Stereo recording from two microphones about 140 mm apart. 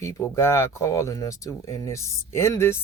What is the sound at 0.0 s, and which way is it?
Speech, 20° left (ahead or behind).